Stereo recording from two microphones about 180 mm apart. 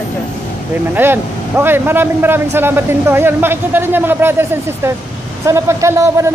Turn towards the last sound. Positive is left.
turn(degrees=-15)  # may be behind; listen again after turning